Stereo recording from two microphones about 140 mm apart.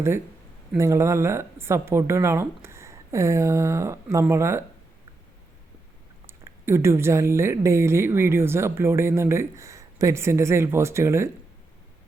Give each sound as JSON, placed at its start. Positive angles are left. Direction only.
{"t": 0.8, "sound": "speech", "side_deg": -20}
{"t": 6.2, "sound": "speech", "side_deg": -20}